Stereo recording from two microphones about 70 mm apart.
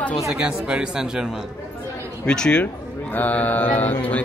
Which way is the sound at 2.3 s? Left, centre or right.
Centre.